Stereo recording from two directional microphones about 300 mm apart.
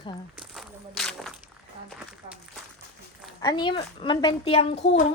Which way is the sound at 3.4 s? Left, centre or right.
Centre.